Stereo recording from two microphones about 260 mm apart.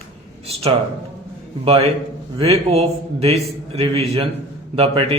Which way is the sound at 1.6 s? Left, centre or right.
Right.